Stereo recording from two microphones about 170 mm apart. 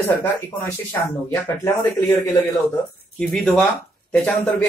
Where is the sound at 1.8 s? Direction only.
15° left (ahead or behind).